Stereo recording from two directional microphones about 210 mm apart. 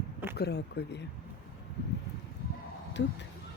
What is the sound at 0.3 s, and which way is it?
Speech, 50° left (ahead or behind).